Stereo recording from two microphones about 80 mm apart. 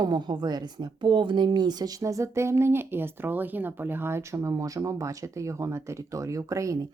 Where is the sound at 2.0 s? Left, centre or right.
Right.